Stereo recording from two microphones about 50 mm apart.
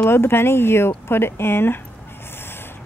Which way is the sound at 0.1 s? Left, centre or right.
Left.